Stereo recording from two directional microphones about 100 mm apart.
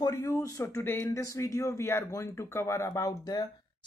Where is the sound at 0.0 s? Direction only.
35° left (ahead or behind).